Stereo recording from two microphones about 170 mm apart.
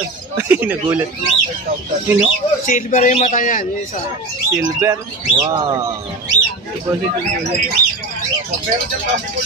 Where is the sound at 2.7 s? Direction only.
50° left (ahead or behind).